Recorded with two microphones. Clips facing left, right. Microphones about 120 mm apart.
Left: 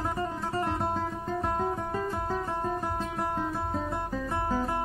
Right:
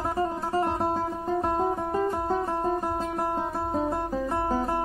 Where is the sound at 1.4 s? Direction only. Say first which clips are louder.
Right 3 dB; 40° right (ahead or behind).